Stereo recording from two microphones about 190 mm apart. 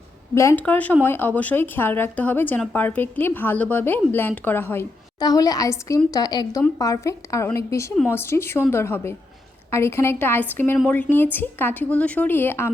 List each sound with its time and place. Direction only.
0.3 s a woman's voice: 10° left (ahead or behind)